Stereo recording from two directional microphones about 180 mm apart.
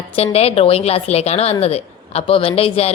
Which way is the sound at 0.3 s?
35° left (ahead or behind).